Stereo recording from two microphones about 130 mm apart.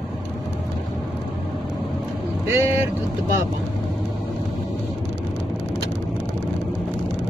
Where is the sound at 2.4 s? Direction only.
15° right (ahead or behind).